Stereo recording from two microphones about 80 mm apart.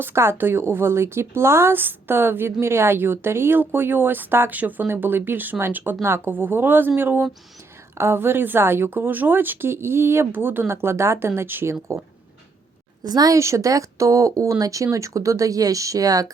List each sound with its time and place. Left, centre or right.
0.0 s a woman's voice: right
13.0 s speech: right